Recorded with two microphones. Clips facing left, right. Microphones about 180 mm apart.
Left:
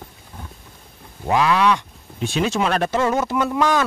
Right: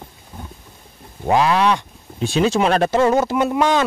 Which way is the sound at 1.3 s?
35° right (ahead or behind).